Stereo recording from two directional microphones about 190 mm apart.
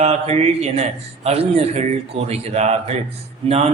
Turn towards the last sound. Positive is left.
turn(degrees=-30)  # may be behind; listen again after turning